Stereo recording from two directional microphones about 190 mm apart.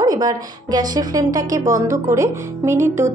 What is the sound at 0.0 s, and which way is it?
A woman's voice, 20° right (ahead or behind).